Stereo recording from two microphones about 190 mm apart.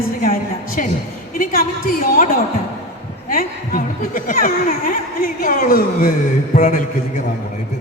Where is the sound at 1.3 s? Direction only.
50° left (ahead or behind).